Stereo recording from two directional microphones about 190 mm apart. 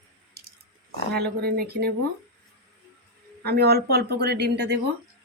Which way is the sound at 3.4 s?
60° right (ahead or behind).